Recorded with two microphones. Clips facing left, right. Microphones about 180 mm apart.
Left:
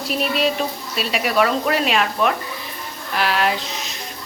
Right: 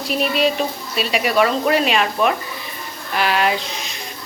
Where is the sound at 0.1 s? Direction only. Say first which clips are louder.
Right 2 dB; centre (ahead or behind).